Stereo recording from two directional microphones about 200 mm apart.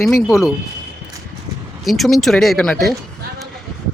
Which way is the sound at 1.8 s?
Centre (ahead or behind).